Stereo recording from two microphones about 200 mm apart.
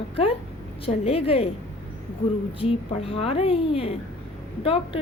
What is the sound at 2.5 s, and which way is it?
A woman's voice, 30° left (ahead or behind).